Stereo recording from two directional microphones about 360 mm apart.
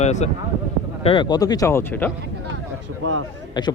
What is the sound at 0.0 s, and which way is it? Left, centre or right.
A man's voice, centre.